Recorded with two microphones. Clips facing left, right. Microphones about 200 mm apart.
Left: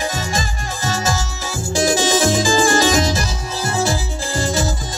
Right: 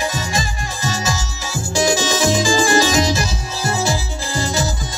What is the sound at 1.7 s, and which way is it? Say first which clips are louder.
Music: left 1 dB; 50° left (ahead or behind).